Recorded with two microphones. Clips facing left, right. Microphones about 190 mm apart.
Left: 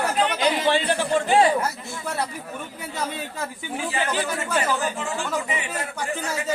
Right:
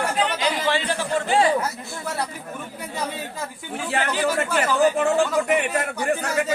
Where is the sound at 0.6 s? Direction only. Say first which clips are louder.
Left 2 dB; 15° left (ahead or behind).